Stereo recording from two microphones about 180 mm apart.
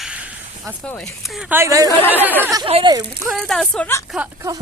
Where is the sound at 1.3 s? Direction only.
10° right (ahead or behind).